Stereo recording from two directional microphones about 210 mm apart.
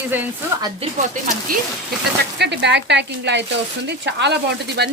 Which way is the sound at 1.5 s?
45° right (ahead or behind).